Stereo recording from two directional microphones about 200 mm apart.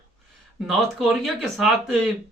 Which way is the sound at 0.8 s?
Centre (ahead or behind).